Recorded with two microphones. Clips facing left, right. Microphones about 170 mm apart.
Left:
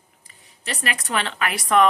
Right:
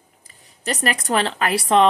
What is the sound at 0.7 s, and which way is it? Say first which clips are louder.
Speech: right 6 dB; 40° right (ahead or behind).